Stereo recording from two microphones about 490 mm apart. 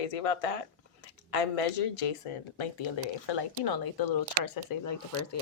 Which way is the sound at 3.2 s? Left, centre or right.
Left.